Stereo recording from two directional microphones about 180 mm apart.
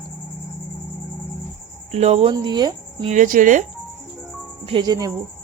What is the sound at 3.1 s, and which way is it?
Speech, 45° right (ahead or behind).